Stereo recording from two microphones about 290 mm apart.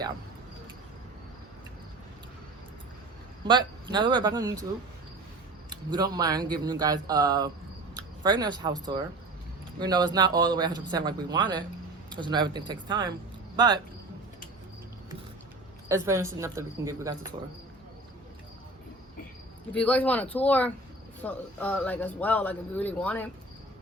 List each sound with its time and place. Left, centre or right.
3.4 s speech: centre
5.7 s speech: centre
15.9 s speech: centre
19.7 s speech: centre